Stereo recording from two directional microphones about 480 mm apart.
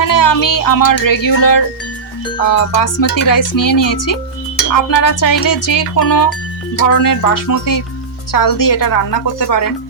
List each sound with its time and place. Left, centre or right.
0.0 s music: left